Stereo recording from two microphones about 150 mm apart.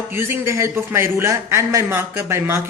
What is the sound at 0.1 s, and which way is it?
A man's voice, 15° right (ahead or behind).